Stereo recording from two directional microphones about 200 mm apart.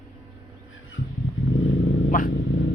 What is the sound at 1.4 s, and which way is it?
Vehicle, 85° left.